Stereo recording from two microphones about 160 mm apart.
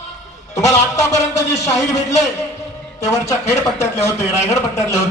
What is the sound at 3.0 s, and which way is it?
A man's voice, 20° left (ahead or behind).